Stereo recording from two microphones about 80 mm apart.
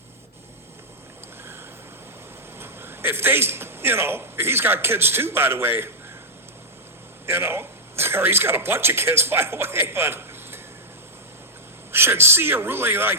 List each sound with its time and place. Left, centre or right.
2.6 s a man's voice: right
7.3 s speech: right
11.9 s a man's voice: right